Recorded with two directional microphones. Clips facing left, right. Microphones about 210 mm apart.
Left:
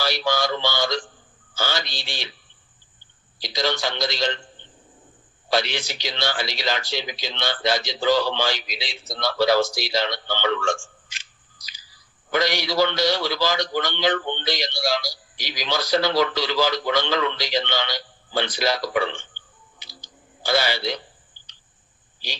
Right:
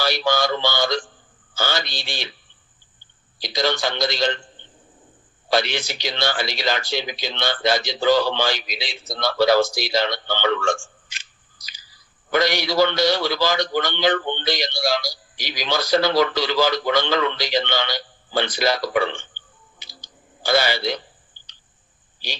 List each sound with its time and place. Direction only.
0.0 s a sound: 55° right (ahead or behind)
1.5 s a man's voice: 55° right (ahead or behind)
3.4 s a man's voice: 55° right (ahead or behind)
5.5 s a man's voice: 55° right (ahead or behind)
19.3 s music: 55° right (ahead or behind)
20.4 s a man's voice: 55° right (ahead or behind)